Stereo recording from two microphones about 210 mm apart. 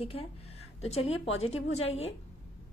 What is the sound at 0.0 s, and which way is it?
Speech, 25° left (ahead or behind).